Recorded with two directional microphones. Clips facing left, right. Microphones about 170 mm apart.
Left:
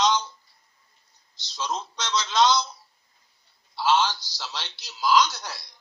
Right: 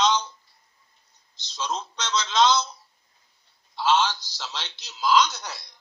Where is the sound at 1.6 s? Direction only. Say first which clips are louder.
Even; 10° left (ahead or behind).